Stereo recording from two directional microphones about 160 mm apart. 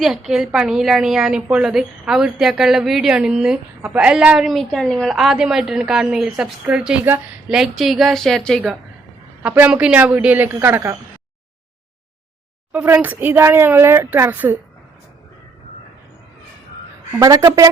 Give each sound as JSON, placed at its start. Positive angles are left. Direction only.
{"t": 0.0, "sound": "a woman's voice", "side_deg": -5}
{"t": 9.4, "sound": "speech", "side_deg": -10}
{"t": 12.7, "sound": "speech", "side_deg": -10}
{"t": 17.2, "sound": "a woman's voice", "side_deg": -25}